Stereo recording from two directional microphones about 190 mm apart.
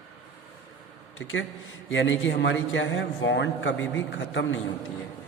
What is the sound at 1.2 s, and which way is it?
A man's voice, 90° left.